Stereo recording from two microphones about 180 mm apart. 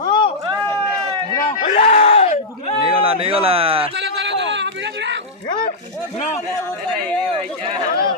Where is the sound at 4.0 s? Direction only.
85° right.